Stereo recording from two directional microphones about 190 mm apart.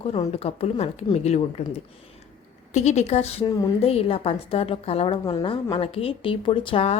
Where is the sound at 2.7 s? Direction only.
35° left (ahead or behind).